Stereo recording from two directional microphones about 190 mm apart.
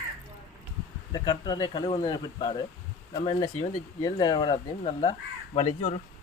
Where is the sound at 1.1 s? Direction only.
20° left (ahead or behind).